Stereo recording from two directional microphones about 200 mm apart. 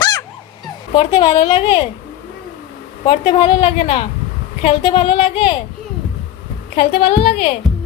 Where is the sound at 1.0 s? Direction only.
25° left (ahead or behind).